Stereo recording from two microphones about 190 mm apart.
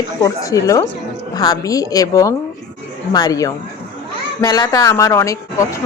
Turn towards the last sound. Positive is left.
turn(degrees=15)  # may be behind; listen again after turning